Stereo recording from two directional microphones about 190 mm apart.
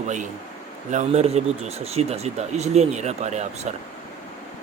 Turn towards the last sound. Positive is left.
turn(degrees=-35)  # may be behind; listen again after turning